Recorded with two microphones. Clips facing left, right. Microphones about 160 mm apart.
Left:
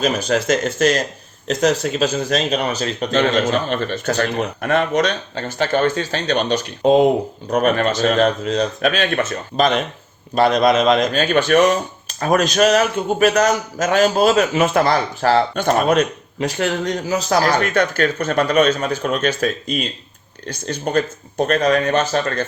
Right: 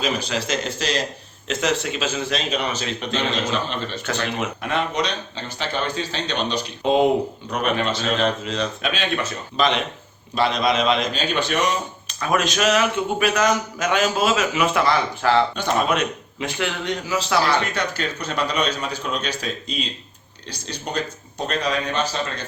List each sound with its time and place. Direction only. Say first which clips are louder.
0.0 s a man's voice: left 6 dB; 45° left (ahead or behind)
1.5 s a man's voice: left 5 dB; 40° left (ahead or behind)